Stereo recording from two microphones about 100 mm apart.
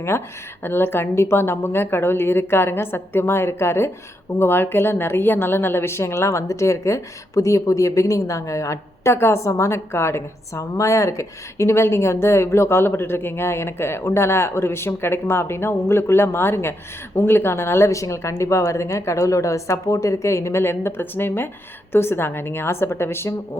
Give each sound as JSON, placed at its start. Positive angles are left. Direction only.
{"t": 0.1, "sound": "a woman's voice", "side_deg": 25}